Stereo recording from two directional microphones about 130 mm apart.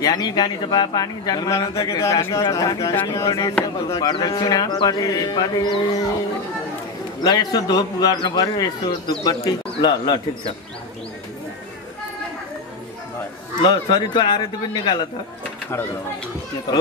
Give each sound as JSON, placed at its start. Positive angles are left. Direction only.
{"t": 0.0, "sound": "a man's voice", "side_deg": 30}
{"t": 7.2, "sound": "speech", "side_deg": 30}
{"t": 13.6, "sound": "speech", "side_deg": 35}